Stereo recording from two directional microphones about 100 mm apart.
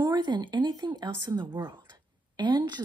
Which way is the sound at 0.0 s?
45° right (ahead or behind).